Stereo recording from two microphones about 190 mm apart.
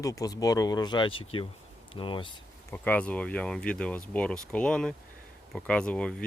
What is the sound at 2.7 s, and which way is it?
Speech, 10° left (ahead or behind).